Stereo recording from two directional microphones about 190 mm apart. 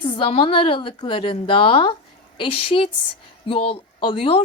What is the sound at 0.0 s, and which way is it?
A woman's voice, 25° left (ahead or behind).